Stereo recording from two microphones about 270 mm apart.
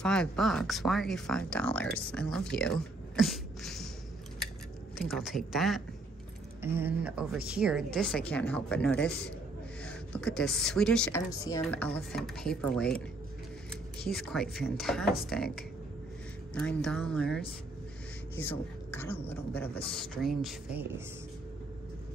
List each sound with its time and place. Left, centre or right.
0.0 s a woman's voice: centre
4.9 s a woman's voice: centre